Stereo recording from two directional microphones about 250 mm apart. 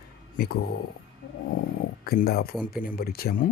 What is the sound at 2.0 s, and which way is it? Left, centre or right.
Speech, left.